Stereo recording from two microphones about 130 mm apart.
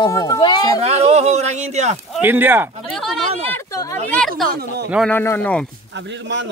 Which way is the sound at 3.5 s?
25° left (ahead or behind).